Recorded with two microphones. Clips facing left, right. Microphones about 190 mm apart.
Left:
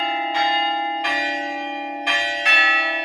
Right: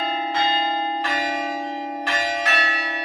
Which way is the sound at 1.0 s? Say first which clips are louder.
Right 1 dB; 15° left (ahead or behind).